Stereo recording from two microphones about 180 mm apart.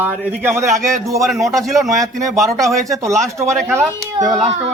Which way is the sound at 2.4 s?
20° right (ahead or behind).